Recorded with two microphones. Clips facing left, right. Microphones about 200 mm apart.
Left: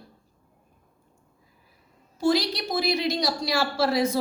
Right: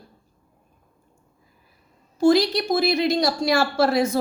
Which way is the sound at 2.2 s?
50° right (ahead or behind).